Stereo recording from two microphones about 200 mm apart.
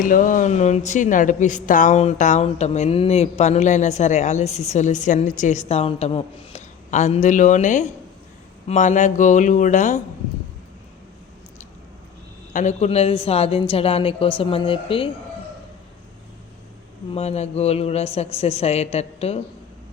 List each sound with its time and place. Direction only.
0.0 s speech: 40° left (ahead or behind)
12.5 s a woman's voice: 35° left (ahead or behind)
17.2 s speech: 30° left (ahead or behind)